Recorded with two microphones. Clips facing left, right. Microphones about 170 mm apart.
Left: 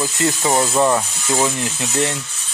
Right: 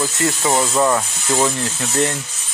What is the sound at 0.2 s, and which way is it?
Speech, 15° left (ahead or behind).